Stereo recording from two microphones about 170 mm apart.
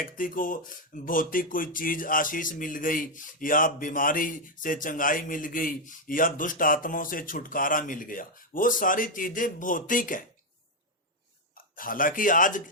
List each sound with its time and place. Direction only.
0.0 s speech: 55° left (ahead or behind)
11.5 s speech: 55° left (ahead or behind)